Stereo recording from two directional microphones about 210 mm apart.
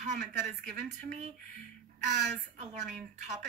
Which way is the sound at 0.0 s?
35° right (ahead or behind).